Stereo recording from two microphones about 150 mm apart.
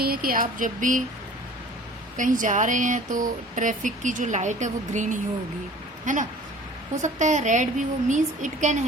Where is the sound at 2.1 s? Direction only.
60° right (ahead or behind).